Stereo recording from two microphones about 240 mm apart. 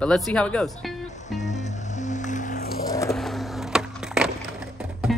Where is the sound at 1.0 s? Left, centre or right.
Left.